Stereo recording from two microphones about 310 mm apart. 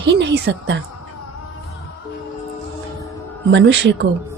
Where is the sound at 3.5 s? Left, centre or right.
Right.